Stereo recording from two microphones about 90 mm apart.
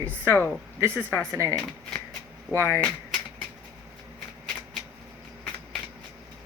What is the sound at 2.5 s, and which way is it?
Speech, 30° left (ahead or behind).